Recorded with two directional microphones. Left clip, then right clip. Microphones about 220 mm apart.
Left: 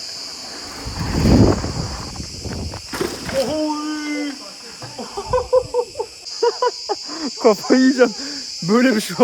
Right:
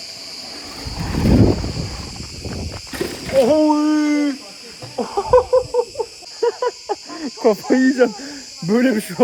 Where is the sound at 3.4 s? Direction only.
5° left (ahead or behind).